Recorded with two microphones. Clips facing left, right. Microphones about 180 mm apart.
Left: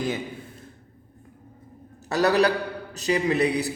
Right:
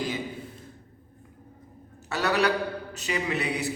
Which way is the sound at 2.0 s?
35° left (ahead or behind).